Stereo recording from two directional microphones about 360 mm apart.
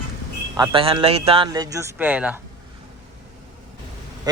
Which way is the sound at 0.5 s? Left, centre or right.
Centre.